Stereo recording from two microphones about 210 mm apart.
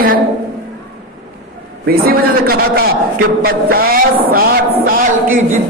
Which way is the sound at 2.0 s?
45° right (ahead or behind).